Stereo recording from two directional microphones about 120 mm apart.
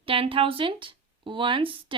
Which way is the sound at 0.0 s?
50° right (ahead or behind).